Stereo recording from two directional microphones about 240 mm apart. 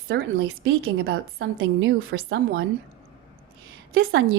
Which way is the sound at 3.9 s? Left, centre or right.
Right.